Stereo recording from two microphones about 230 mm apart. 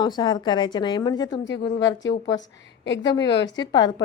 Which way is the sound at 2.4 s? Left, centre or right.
Left.